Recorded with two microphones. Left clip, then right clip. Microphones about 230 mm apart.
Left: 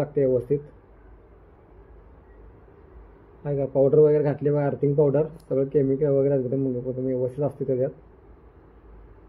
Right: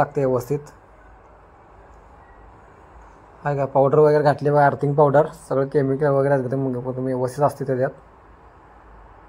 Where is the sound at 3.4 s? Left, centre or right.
Centre.